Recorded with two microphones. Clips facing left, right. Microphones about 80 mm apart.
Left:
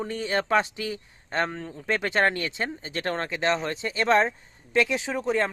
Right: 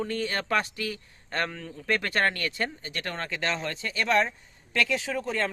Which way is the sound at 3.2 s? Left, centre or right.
Left.